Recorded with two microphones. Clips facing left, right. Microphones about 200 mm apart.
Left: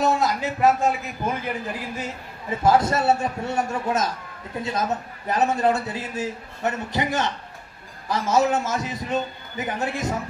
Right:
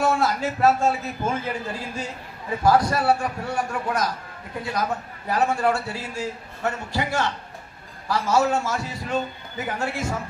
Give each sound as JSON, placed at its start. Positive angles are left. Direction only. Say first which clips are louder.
{"t": 0.0, "sound": "a man's voice", "louder": "even", "side_deg": 15}